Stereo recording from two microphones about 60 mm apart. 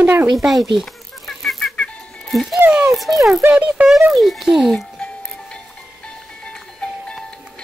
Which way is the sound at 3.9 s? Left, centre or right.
Centre.